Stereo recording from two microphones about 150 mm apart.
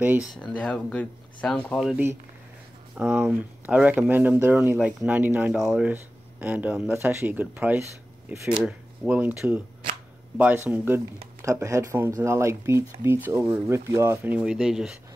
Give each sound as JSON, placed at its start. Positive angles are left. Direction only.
{"t": 0.0, "sound": "speech", "side_deg": -10}
{"t": 0.3, "sound": "speech", "side_deg": 10}
{"t": 3.0, "sound": "speech", "side_deg": -5}